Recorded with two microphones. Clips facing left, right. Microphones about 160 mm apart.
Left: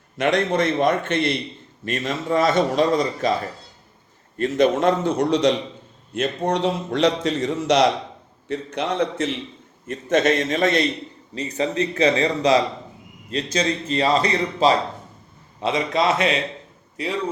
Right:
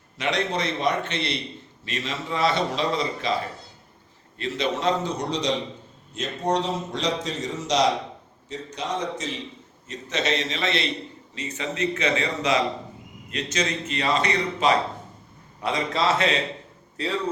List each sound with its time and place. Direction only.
0.2 s a man's voice: 50° left (ahead or behind)
4.4 s a man's voice: 50° left (ahead or behind)
11.3 s a man's voice: 35° left (ahead or behind)
15.6 s a man's voice: 20° left (ahead or behind)